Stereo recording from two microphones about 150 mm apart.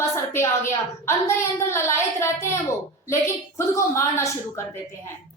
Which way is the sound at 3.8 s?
20° left (ahead or behind).